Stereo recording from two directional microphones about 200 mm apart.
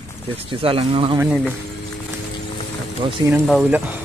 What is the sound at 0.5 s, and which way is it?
Speech, 25° right (ahead or behind).